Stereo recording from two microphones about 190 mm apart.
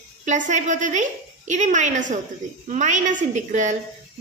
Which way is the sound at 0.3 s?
40° right (ahead or behind).